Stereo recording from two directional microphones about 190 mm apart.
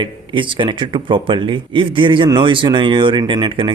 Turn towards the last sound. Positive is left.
turn(degrees=-25)  # may be behind; listen again after turning